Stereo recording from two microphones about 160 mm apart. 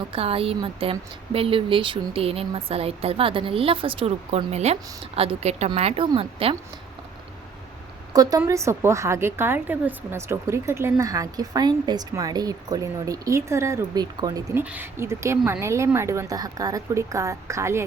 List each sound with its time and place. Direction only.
0.1 s speech: 35° right (ahead or behind)
8.1 s speech: 25° right (ahead or behind)
14.6 s speech: 10° right (ahead or behind)